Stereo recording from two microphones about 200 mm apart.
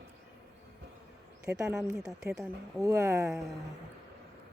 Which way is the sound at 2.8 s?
15° right (ahead or behind).